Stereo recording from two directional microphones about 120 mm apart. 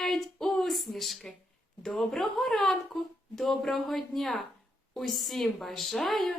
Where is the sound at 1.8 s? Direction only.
Centre (ahead or behind).